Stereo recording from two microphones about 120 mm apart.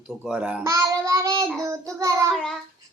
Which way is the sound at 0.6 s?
25° right (ahead or behind).